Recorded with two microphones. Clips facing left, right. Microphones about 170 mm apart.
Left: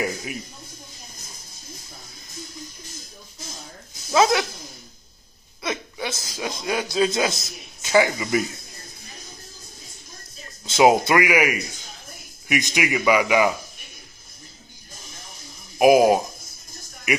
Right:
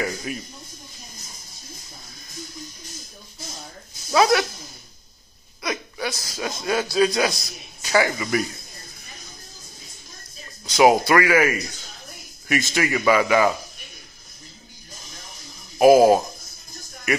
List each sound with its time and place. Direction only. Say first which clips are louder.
0.0 s speech: even; 15° left (ahead or behind)
4.1 s speech: right 1 dB; 20° left (ahead or behind)
5.6 s speech: right 1 dB; 25° left (ahead or behind)
10.6 s a man's voice: even; 25° left (ahead or behind)
15.8 s a man's voice: right 2 dB; 15° left (ahead or behind)